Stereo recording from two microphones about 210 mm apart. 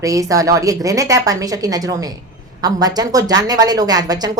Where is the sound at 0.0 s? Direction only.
15° right (ahead or behind).